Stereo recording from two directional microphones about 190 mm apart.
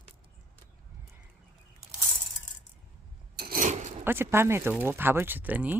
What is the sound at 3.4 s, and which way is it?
Filing, 45° right (ahead or behind).